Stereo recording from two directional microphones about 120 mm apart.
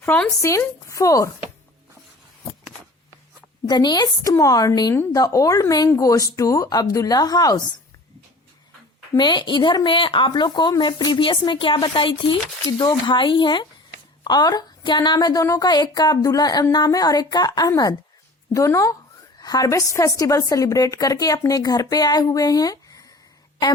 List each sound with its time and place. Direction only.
0.0 s speech: 10° left (ahead or behind)
0.3 s a woman's voice: 25° left (ahead or behind)
3.7 s a woman's voice: 35° left (ahead or behind)
9.1 s a woman's voice: 40° left (ahead or behind)